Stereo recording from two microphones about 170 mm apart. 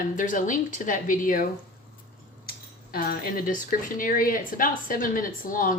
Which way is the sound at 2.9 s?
60° left (ahead or behind).